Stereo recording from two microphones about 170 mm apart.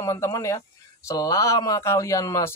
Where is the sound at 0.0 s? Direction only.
20° left (ahead or behind).